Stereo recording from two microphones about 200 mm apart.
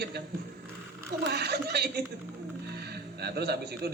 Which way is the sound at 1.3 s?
55° right (ahead or behind).